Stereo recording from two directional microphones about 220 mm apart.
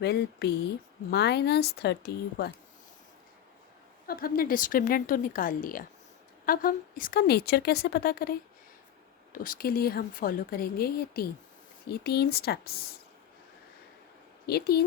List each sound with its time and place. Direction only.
0.0 s a woman's voice: 50° left (ahead or behind)
4.0 s a woman's voice: 45° left (ahead or behind)
14.4 s a woman's voice: 45° left (ahead or behind)